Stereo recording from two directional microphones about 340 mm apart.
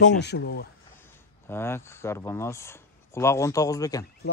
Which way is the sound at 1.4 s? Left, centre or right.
Centre.